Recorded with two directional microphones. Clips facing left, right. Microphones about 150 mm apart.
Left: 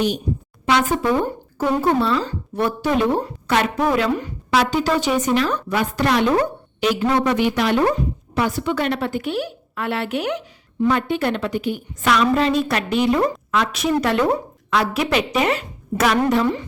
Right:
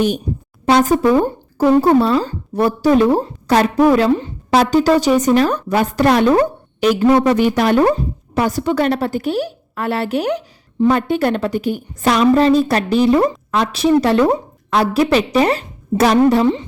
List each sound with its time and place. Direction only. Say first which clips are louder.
0.6 s a woman's voice: right 6 dB; 40° right (ahead or behind)
4.5 s a woman's voice: right 6 dB; 40° right (ahead or behind)
14.7 s a woman's voice: right 5 dB; 45° right (ahead or behind)